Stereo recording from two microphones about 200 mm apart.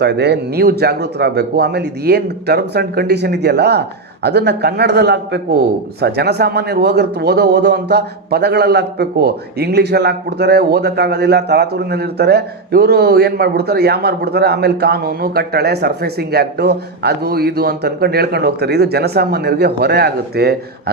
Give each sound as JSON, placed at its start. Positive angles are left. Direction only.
{"t": 0.0, "sound": "speech", "side_deg": -55}